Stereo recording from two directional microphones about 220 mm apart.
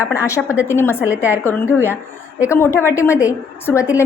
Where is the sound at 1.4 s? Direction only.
10° left (ahead or behind).